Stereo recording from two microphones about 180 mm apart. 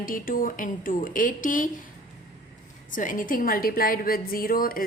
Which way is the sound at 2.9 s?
45° left (ahead or behind).